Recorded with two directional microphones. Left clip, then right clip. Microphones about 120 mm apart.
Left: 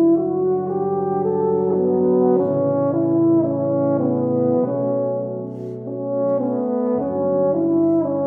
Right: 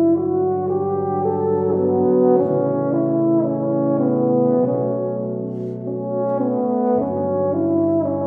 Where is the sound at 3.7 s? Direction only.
25° left (ahead or behind).